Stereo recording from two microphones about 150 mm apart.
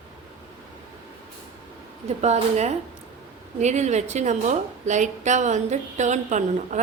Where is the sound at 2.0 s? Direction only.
50° right (ahead or behind).